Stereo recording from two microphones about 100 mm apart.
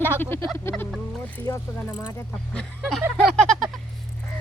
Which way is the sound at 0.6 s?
25° left (ahead or behind).